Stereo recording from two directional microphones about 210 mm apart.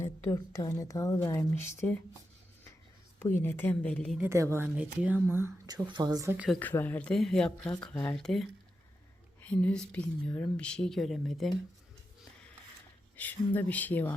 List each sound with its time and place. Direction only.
0.0 s a woman's voice: 15° left (ahead or behind)
3.4 s a woman's voice: 10° left (ahead or behind)
4.2 s speech: 15° right (ahead or behind)
6.3 s speech: 5° right (ahead or behind)
6.6 s a woman's voice: 10° left (ahead or behind)
8.1 s speech: centre (ahead or behind)
13.1 s a woman's voice: 10° left (ahead or behind)